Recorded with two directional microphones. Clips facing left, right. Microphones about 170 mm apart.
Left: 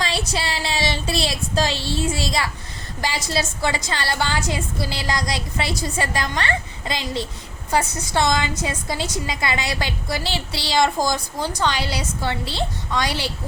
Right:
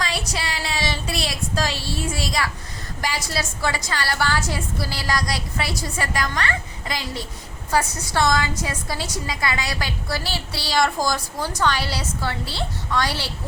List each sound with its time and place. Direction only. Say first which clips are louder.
0.0 s child singing: left 2 dB; 25° left (ahead or behind)
3.0 s a woman's voice: left 3 dB; 25° left (ahead or behind)